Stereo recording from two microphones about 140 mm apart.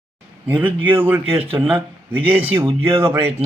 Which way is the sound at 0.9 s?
15° right (ahead or behind).